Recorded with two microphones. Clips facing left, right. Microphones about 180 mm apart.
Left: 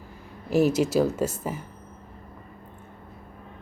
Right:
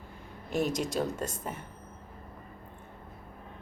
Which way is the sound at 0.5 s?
5° left (ahead or behind).